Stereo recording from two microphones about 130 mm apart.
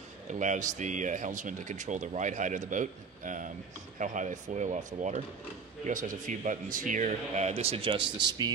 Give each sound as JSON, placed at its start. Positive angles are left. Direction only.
{"t": 0.3, "sound": "speech", "side_deg": -70}
{"t": 5.9, "sound": "a man's voice", "side_deg": -85}